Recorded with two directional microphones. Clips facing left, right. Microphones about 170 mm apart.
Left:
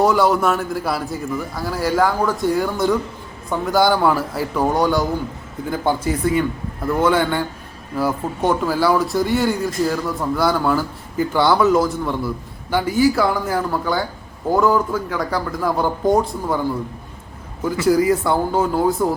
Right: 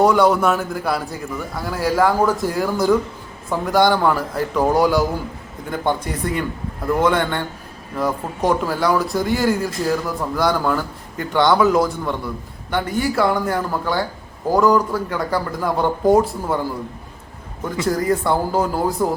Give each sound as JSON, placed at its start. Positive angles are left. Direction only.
{"t": 0.0, "sound": "speech", "side_deg": 0}
{"t": 17.8, "sound": "speech", "side_deg": 5}